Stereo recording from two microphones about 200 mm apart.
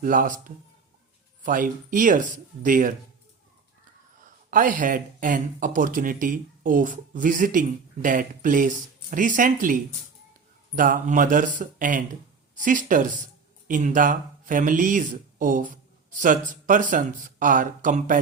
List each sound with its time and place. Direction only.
0.0 s speech: 40° right (ahead or behind)
4.5 s speech: 40° right (ahead or behind)